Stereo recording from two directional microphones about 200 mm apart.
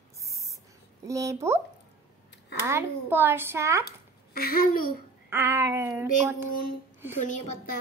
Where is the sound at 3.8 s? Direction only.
50° left (ahead or behind).